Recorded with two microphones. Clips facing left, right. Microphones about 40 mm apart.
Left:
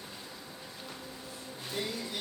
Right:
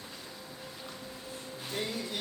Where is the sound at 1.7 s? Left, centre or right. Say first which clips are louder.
Right 1 dB; centre.